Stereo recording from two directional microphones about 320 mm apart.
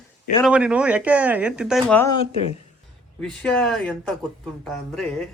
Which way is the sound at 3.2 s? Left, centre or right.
Centre.